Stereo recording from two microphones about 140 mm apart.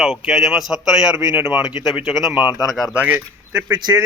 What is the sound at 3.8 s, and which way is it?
Speech, 30° right (ahead or behind).